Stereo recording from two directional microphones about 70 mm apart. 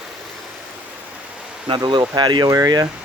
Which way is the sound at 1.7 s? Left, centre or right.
Right.